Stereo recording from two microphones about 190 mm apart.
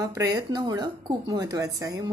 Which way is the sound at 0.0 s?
20° right (ahead or behind).